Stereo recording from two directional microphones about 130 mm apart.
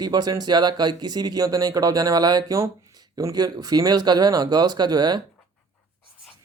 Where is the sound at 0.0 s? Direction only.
30° right (ahead or behind).